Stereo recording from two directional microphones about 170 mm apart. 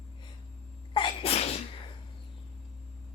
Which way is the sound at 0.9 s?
30° left (ahead or behind).